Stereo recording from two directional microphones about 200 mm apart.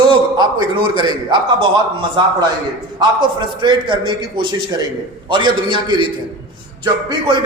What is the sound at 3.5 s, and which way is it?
A man's voice, 25° right (ahead or behind).